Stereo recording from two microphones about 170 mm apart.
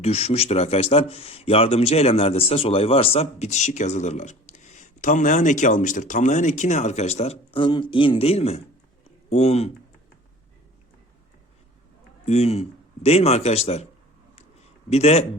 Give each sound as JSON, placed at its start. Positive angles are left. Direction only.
{"t": 0.0, "sound": "speech", "side_deg": 35}
{"t": 12.2, "sound": "speech", "side_deg": 35}
{"t": 14.8, "sound": "speech", "side_deg": 40}